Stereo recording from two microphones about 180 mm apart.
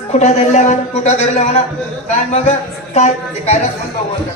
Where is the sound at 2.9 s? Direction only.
40° left (ahead or behind).